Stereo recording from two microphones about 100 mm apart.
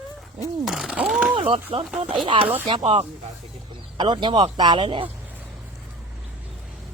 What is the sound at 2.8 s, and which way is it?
Speech, 90° right.